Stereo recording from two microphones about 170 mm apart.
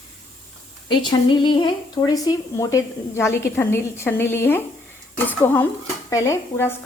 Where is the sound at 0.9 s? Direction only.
25° left (ahead or behind).